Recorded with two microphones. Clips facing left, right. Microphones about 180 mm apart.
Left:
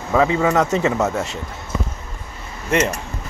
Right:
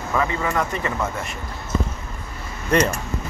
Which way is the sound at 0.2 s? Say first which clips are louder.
Left 8 dB; 85° left.